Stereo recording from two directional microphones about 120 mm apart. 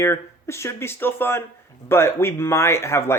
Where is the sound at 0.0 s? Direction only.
20° left (ahead or behind).